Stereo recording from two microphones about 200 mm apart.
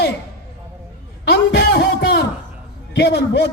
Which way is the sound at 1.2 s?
55° left (ahead or behind).